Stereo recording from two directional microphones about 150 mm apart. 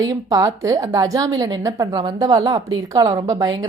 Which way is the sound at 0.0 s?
25° right (ahead or behind).